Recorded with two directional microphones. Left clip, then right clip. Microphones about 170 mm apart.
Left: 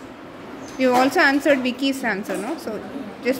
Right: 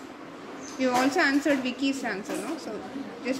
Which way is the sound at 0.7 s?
30° left (ahead or behind).